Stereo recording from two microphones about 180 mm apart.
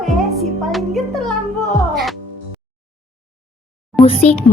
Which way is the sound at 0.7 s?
Centre (ahead or behind).